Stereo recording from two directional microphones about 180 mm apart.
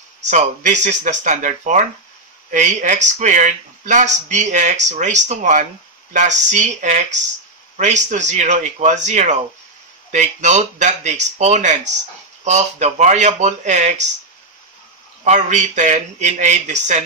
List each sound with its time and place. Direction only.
0.2 s speech: 40° right (ahead or behind)
15.2 s speech: 40° right (ahead or behind)